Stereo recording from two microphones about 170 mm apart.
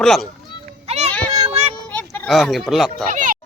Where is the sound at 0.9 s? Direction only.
40° right (ahead or behind).